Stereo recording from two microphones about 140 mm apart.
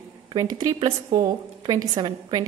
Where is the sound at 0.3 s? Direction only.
30° right (ahead or behind).